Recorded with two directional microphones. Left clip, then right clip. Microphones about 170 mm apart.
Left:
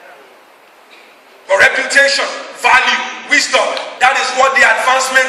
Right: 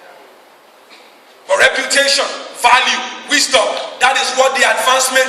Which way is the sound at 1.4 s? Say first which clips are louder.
Left 2 dB; 55° right (ahead or behind).